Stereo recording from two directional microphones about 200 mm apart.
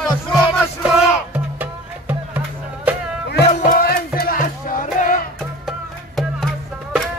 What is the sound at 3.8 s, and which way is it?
Music, 50° left (ahead or behind).